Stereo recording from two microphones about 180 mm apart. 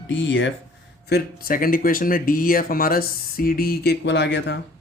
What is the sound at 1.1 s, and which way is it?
Speech, 55° left (ahead or behind).